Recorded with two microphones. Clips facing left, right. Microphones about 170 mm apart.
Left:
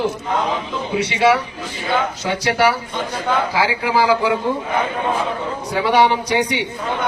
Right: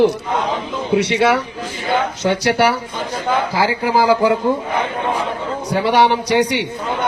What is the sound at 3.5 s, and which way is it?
Speech, 45° right (ahead or behind).